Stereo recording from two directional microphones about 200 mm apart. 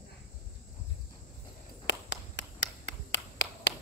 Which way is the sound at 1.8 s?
60° left (ahead or behind).